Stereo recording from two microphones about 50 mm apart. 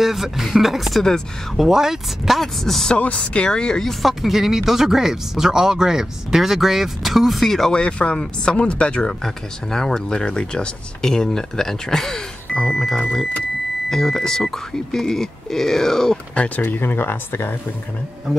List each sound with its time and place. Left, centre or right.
0.0 s speech: centre
2.4 s speech: centre
3.0 s speech: left
3.4 s speech: centre
4.0 s speech: centre
7.7 s speech: left
16.3 s speech: left
16.6 s speech: left